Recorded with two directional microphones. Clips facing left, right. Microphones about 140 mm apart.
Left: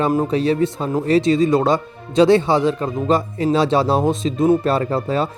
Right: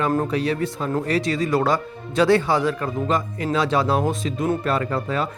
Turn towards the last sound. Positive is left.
turn(degrees=30)  # may be behind; listen again after turning